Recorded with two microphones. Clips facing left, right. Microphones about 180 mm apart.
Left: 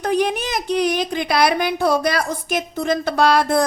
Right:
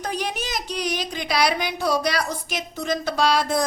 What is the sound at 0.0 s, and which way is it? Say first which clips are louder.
A woman's voice: left 8 dB; 55° left (ahead or behind).